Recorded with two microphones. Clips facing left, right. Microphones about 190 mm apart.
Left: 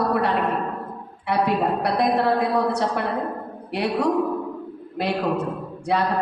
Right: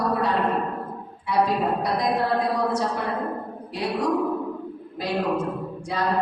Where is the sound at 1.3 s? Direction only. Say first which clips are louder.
Left 1 dB; 65° left (ahead or behind).